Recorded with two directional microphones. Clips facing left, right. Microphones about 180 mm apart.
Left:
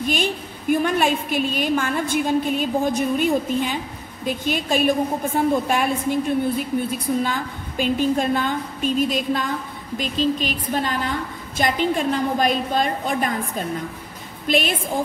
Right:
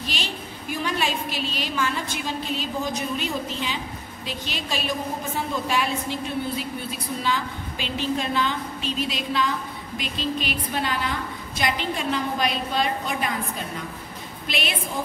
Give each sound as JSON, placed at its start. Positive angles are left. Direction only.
{"t": 0.0, "sound": "a woman's voice", "side_deg": 50}
{"t": 14.5, "sound": "a woman's voice", "side_deg": 45}